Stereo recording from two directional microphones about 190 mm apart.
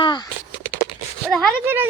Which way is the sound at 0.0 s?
25° left (ahead or behind).